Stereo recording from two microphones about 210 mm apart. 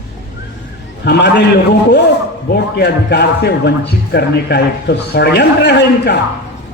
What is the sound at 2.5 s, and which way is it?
A man's voice, 55° left (ahead or behind).